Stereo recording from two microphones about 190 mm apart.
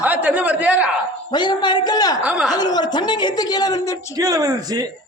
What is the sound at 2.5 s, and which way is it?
Speech, 20° left (ahead or behind).